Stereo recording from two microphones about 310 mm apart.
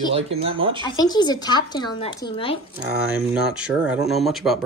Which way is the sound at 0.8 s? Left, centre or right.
Centre.